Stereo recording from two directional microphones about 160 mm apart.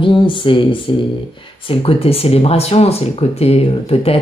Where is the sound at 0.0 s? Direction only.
30° left (ahead or behind).